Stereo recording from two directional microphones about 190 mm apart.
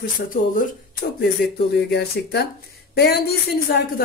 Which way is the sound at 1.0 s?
55° left (ahead or behind).